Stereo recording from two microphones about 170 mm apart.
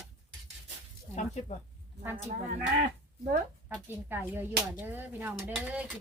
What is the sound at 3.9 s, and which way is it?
Speech, 10° right (ahead or behind).